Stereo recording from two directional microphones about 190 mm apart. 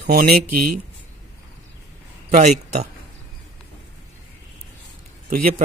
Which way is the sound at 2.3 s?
40° right (ahead or behind).